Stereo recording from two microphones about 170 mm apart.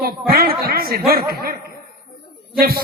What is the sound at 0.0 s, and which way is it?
A woman's voice, 65° right (ahead or behind).